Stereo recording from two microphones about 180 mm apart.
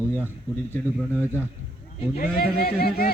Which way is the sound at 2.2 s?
55° left (ahead or behind).